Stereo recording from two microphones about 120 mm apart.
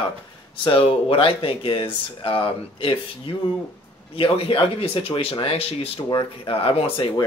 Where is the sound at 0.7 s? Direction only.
50° left (ahead or behind).